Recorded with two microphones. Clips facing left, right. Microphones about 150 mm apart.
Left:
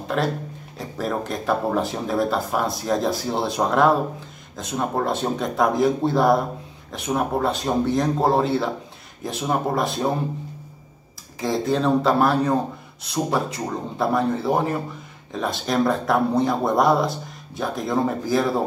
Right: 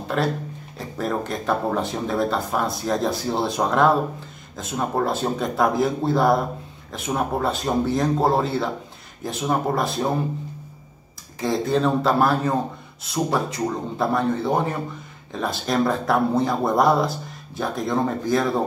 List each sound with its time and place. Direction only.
0.1 s speech: centre (ahead or behind)
11.3 s speech: centre (ahead or behind)